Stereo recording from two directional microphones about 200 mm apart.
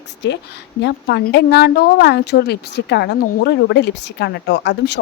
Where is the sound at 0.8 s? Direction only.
55° left (ahead or behind).